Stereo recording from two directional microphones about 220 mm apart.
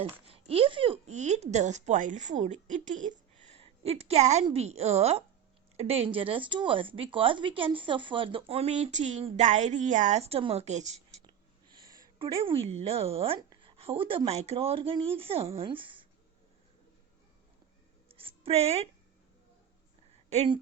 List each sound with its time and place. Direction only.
0.0 s a woman's voice: 25° right (ahead or behind)
12.2 s speech: 25° right (ahead or behind)
18.1 s a sound: 25° right (ahead or behind)
20.3 s speech: 30° right (ahead or behind)